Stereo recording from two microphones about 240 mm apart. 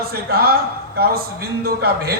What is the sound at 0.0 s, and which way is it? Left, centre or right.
A man's voice, right.